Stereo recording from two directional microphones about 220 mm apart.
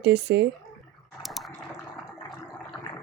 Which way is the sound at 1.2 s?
Centre (ahead or behind).